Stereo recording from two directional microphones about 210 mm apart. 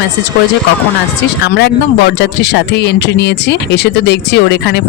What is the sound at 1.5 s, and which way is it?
Speech, 55° left (ahead or behind).